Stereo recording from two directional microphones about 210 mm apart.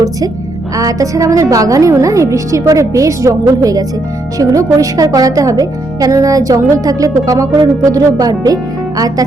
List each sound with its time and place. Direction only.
0.8 s a woman's voice: 15° right (ahead or behind)